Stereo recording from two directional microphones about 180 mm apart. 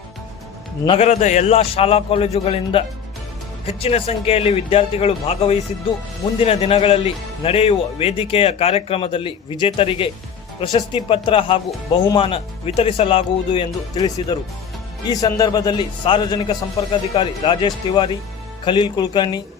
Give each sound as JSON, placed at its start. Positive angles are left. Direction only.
{"t": 0.9, "sound": "a man's voice", "side_deg": 35}